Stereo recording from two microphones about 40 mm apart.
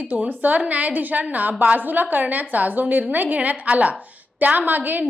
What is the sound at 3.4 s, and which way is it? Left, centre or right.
A woman's voice, right.